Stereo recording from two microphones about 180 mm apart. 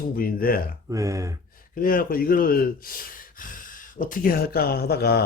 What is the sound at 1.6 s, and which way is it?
Speech, 50° left (ahead or behind).